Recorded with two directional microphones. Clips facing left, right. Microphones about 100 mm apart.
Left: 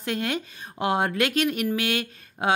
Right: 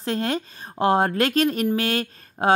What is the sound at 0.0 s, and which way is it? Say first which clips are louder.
Speech: right 3 dB; 35° right (ahead or behind).